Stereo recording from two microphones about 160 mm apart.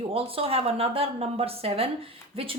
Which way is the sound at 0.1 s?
35° right (ahead or behind).